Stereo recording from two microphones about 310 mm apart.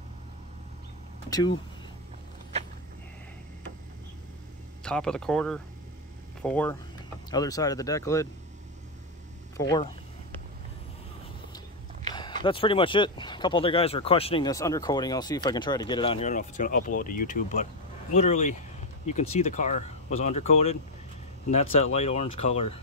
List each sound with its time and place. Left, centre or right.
1.3 s speech: centre
4.8 s speech: centre
9.6 s speech: centre
12.1 s a sound: centre
12.4 s speech: centre